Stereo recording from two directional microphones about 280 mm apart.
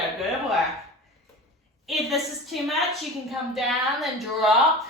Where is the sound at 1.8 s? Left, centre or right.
Centre.